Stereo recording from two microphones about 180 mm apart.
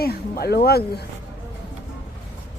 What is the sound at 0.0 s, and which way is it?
Speech, 60° left (ahead or behind).